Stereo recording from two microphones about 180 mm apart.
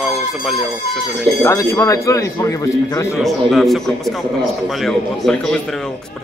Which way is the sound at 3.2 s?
Centre (ahead or behind).